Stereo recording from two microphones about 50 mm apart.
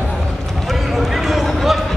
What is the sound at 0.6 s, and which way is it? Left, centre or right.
Run, centre.